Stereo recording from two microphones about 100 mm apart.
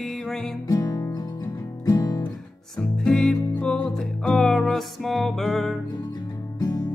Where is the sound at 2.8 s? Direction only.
5° left (ahead or behind).